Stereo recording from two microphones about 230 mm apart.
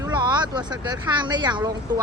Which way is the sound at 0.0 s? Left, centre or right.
Centre.